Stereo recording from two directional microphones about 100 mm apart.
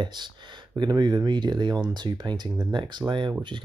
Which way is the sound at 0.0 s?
50° right (ahead or behind).